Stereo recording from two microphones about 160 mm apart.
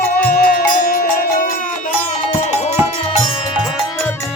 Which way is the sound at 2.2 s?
45° left (ahead or behind).